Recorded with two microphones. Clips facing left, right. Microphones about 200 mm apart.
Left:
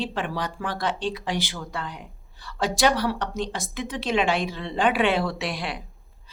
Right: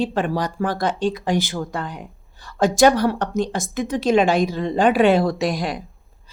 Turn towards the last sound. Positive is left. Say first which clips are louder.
# right 8 dB
turn(degrees=-40)  # may be behind; listen again after turning